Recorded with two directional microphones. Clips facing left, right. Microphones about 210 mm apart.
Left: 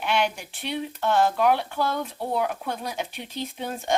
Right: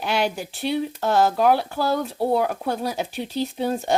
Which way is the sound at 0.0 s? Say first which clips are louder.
Right 2 dB; 35° right (ahead or behind).